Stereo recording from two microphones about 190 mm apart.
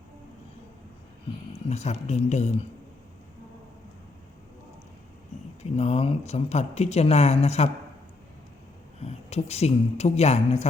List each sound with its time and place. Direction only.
1.7 s speech: 35° left (ahead or behind)
5.7 s speech: 30° left (ahead or behind)
9.0 s a woman's voice: 35° left (ahead or behind)